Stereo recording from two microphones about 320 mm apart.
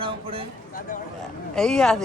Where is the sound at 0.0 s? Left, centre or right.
Centre.